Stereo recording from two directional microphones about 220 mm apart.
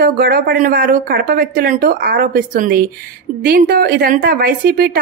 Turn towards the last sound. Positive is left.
turn(degrees=-40)  # may be behind; listen again after turning